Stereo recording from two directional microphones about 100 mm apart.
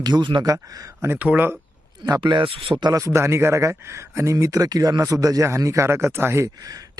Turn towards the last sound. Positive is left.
turn(degrees=-30)  # may be behind; listen again after turning